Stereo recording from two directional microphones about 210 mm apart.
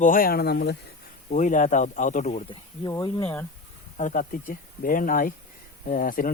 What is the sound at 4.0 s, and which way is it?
Speech, 40° left (ahead or behind).